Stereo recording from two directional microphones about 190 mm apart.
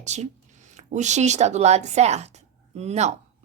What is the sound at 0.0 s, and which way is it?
A woman's voice, 35° right (ahead or behind).